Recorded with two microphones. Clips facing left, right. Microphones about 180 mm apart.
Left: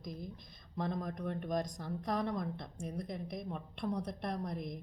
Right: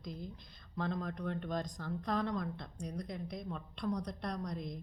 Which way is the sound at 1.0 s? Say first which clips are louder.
Even; 15° left (ahead or behind).